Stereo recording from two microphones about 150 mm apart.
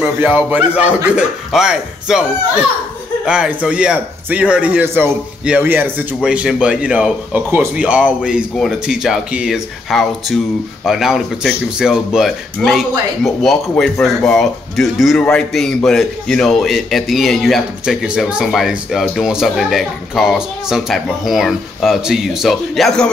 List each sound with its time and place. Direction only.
0.0 s a man's voice: 10° right (ahead or behind)